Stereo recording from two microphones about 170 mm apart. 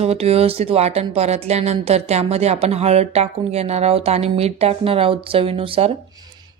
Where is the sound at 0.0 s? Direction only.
35° right (ahead or behind).